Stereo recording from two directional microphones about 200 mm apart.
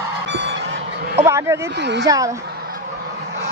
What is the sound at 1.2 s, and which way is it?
Speech, 15° right (ahead or behind).